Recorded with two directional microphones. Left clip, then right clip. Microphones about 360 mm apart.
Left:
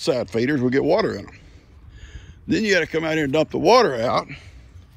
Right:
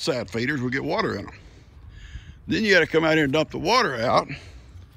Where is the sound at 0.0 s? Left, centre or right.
Centre.